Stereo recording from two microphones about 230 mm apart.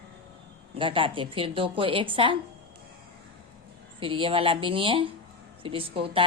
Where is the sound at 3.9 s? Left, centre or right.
Right.